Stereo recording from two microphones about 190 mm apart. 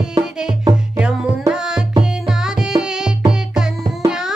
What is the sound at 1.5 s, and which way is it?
Tabla, 5° right (ahead or behind).